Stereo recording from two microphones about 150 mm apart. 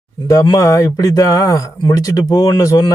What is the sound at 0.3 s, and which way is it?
Speech, 25° left (ahead or behind).